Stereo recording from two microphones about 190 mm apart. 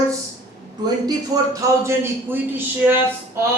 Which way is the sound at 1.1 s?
20° right (ahead or behind).